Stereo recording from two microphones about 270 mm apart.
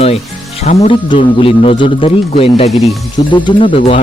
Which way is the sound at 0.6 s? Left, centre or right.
Left.